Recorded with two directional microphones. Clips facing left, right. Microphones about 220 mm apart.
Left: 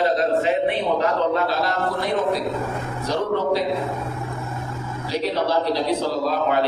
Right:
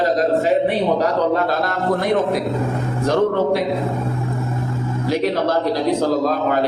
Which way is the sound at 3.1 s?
50° right (ahead or behind).